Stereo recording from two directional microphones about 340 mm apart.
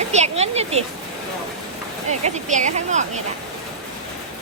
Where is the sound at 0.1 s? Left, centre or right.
Centre.